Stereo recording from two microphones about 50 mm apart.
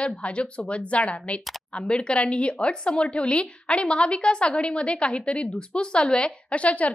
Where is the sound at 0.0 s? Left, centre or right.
Left.